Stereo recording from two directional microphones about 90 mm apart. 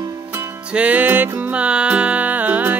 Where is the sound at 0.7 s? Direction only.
15° right (ahead or behind).